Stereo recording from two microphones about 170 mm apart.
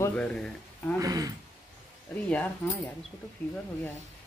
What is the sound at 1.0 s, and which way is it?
Speech, 20° right (ahead or behind).